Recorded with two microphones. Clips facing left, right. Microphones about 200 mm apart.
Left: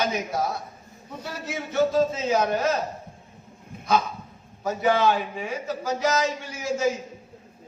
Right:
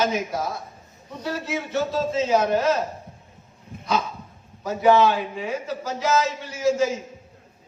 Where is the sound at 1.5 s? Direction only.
50° left (ahead or behind).